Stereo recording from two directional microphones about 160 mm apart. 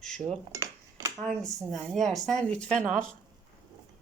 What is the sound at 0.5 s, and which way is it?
Dishes, 20° right (ahead or behind).